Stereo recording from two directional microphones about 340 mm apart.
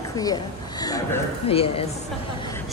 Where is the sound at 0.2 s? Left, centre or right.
Centre.